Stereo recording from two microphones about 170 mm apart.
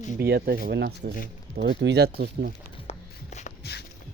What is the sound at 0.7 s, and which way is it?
Speech, 80° right.